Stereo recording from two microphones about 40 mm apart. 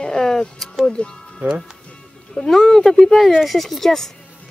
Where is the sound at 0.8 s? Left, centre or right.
Left.